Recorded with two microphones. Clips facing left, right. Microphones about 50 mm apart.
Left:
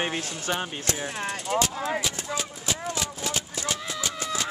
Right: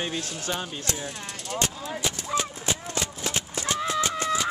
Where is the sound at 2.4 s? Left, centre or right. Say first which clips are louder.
Right 1 dB; right.